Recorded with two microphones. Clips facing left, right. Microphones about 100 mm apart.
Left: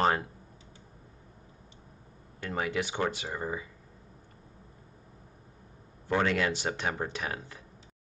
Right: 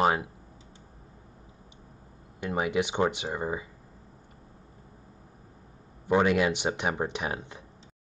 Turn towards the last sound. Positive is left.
turn(degrees=-20)  # may be behind; listen again after turning